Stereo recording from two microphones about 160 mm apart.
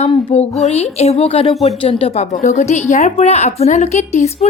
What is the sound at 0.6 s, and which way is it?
A woman's voice, 40° left (ahead or behind).